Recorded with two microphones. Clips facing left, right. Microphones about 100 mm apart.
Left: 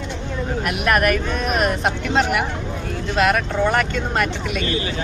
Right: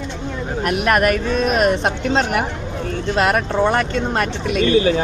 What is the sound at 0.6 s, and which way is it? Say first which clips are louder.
Speech: right 3 dB; 40° right (ahead or behind).